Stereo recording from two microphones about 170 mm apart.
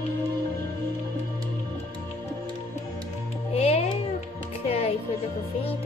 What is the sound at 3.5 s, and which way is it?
Music, 40° left (ahead or behind).